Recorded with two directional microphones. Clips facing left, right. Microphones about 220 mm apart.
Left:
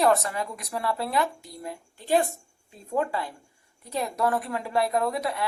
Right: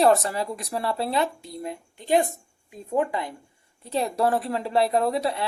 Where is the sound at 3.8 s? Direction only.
30° right (ahead or behind).